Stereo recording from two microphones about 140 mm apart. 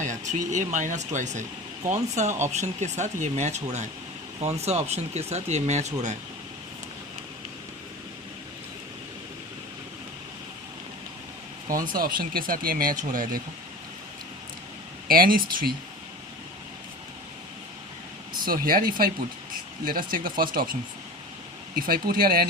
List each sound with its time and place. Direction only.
0.0 s speech: 60° right (ahead or behind)
11.7 s speech: 85° right
15.0 s speech: 90° right
18.4 s speech: 90° right
21.8 s speech: 90° right